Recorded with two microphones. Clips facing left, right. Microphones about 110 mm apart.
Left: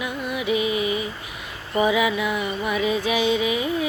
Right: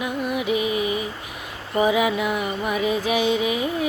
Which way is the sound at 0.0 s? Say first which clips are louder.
Right 2 dB; 50° right (ahead or behind).